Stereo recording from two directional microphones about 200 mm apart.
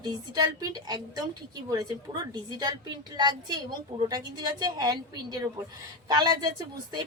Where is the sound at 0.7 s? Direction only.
20° right (ahead or behind).